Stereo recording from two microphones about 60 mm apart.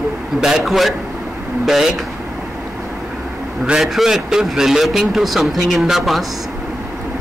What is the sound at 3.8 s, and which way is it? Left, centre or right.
A man's voice, centre.